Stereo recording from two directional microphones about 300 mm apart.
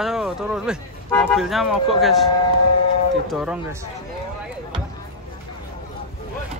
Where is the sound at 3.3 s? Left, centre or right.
Centre.